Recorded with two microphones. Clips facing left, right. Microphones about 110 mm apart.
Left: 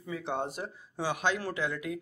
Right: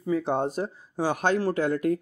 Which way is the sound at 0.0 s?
40° right (ahead or behind).